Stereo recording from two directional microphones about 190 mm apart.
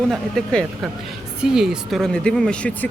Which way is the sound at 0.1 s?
Centre (ahead or behind).